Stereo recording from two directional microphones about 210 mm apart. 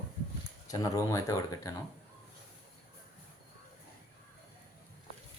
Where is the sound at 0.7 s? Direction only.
15° left (ahead or behind).